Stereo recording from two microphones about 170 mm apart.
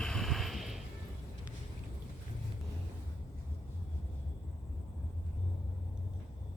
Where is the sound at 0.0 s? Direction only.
Centre (ahead or behind).